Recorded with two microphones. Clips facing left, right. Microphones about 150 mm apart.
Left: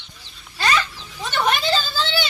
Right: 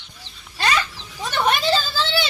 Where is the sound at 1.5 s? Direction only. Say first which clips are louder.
Right 1 dB; 5° right (ahead or behind).